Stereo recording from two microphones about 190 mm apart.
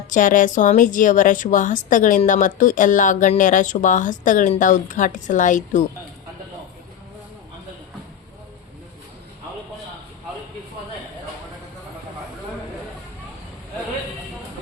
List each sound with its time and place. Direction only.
0.1 s a woman's voice: 45° left (ahead or behind)